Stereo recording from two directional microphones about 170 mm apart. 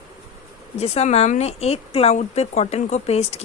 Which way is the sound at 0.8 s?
35° left (ahead or behind).